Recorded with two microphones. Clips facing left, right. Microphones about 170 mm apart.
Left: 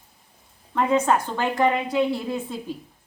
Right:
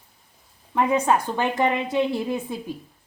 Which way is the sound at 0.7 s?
15° right (ahead or behind).